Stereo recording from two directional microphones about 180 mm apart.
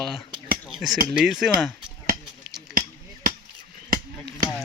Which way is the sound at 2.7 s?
50° right (ahead or behind).